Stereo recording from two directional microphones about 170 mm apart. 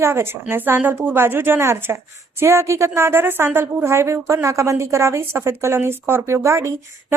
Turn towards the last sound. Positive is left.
turn(degrees=-15)  # may be behind; listen again after turning